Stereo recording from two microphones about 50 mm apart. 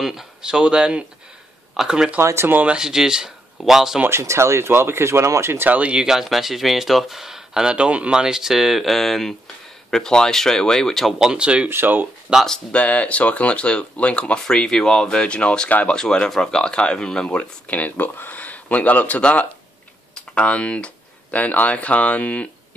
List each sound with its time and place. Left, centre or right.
0.0 s speech: centre
4.1 s speech: right
5.7 s speech: right
5.9 s speech: centre
7.7 s speech: right
8.1 s speech: centre
11.1 s speech: centre
11.7 s speech: right
12.3 s speech: centre
12.7 s speech: left
14.4 s speech: centre
17.4 s speech: left
20.3 s speech: left